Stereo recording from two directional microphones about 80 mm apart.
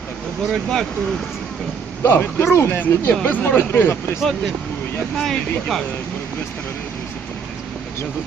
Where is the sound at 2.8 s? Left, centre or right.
Left.